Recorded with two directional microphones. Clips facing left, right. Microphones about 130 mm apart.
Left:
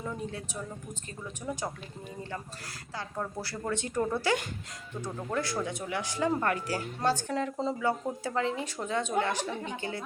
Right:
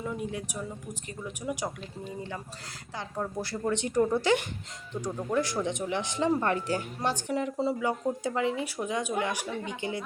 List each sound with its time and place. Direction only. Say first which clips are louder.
0.0 s speech: right 3 dB; 15° right (ahead or behind)
3.2 s speech: right 4 dB; 15° right (ahead or behind)